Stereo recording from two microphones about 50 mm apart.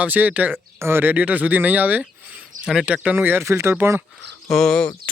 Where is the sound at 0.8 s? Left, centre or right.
Right.